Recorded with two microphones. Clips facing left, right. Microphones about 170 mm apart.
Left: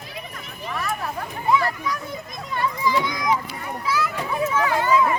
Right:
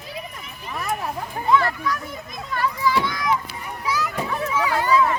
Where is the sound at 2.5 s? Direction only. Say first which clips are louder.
Right 1 dB; 20° left (ahead or behind).